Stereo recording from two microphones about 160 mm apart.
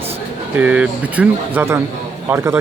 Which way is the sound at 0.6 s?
10° right (ahead or behind).